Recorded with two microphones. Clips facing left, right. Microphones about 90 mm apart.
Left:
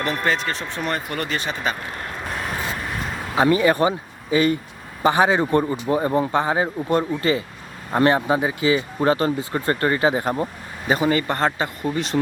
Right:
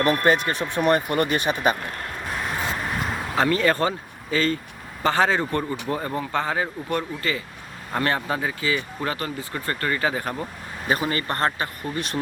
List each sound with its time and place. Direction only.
0.2 s speech: 15° right (ahead or behind)
3.3 s a man's voice: 15° left (ahead or behind)